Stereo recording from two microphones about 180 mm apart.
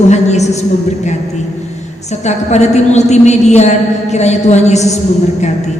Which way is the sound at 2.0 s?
40° left (ahead or behind).